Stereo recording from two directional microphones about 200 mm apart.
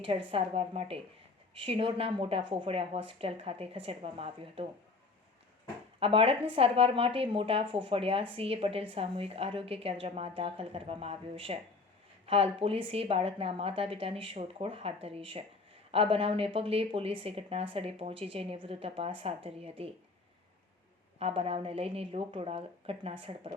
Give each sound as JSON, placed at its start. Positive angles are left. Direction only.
{"t": 0.3, "sound": "speech", "side_deg": -30}
{"t": 6.0, "sound": "speech", "side_deg": -25}
{"t": 21.2, "sound": "speech", "side_deg": -30}